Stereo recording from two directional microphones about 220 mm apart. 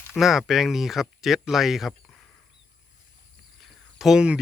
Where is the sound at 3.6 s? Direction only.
Centre (ahead or behind).